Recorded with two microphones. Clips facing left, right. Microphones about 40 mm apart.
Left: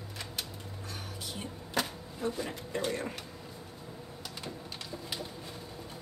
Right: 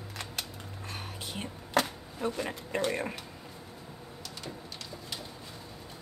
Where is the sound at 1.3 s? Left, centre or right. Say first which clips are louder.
Right 9 dB; right.